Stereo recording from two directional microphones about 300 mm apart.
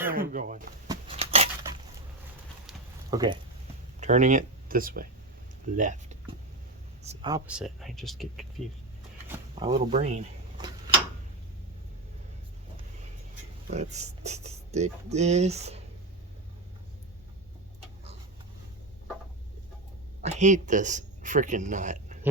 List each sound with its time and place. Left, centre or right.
0.1 s speech: right
0.9 s a sound: centre
3.1 s speech: centre
4.0 s speech: right; by 8.6 s centre
9.3 s speech: centre
13.7 s speech: right
20.2 s speech: right